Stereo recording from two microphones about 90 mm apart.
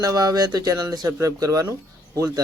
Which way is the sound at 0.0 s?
40° right (ahead or behind).